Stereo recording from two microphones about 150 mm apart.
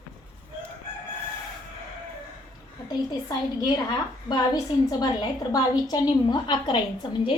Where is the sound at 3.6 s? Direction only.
30° left (ahead or behind).